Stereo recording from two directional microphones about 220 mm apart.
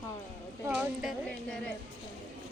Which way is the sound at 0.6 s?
5° right (ahead or behind).